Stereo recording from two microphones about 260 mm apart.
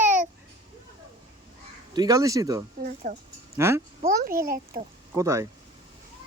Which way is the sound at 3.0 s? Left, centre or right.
Right.